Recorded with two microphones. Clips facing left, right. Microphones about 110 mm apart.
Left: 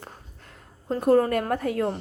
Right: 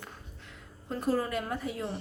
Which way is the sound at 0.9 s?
55° left (ahead or behind).